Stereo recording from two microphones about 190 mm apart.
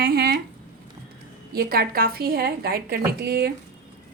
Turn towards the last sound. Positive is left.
turn(degrees=-55)  # may be behind; listen again after turning